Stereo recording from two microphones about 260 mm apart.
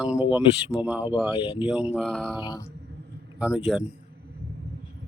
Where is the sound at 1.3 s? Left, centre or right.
Left.